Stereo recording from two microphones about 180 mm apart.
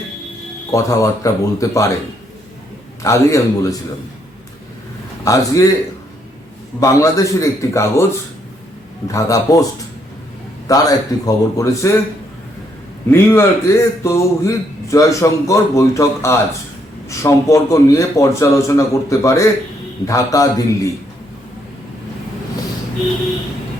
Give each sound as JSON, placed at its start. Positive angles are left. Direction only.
{"t": 0.7, "sound": "a man's voice", "side_deg": 15}
{"t": 3.0, "sound": "a man's voice", "side_deg": 15}
{"t": 5.2, "sound": "a man's voice", "side_deg": 20}
{"t": 6.7, "sound": "a man's voice", "side_deg": 15}
{"t": 9.1, "sound": "speech", "side_deg": 20}
{"t": 10.7, "sound": "a man's voice", "side_deg": 20}
{"t": 13.1, "sound": "a man's voice", "side_deg": 10}